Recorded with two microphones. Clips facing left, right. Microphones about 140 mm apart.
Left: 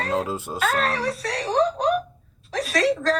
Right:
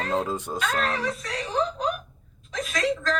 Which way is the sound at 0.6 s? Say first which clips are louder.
Left 4 dB; 35° left (ahead or behind).